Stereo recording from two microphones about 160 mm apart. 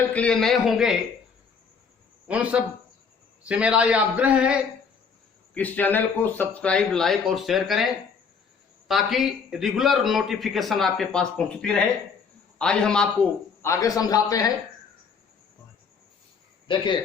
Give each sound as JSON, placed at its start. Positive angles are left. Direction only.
{"t": 0.1, "sound": "a man's voice", "side_deg": 5}
{"t": 2.2, "sound": "a man's voice", "side_deg": -10}
{"t": 5.5, "sound": "speech", "side_deg": 10}
{"t": 8.9, "sound": "a man's voice", "side_deg": 0}
{"t": 13.6, "sound": "a man's voice", "side_deg": 20}
{"t": 16.6, "sound": "speech", "side_deg": 30}